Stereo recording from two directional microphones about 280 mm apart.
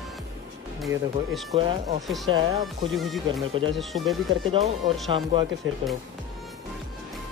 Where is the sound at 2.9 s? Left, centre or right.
Centre.